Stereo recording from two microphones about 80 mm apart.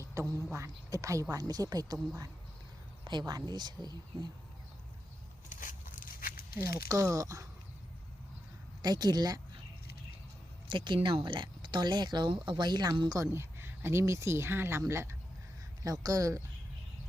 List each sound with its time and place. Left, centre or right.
0.0 s a sound: right
0.5 s a woman's voice: right
3.0 s speech: right
6.8 s a woman's voice: right
8.8 s speech: right
10.7 s speech: right
13.3 s speech: right
15.8 s a woman's voice: right